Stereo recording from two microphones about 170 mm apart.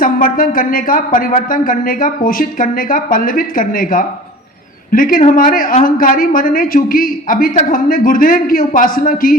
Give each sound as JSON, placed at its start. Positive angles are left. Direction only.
{"t": 0.0, "sound": "speech", "side_deg": 55}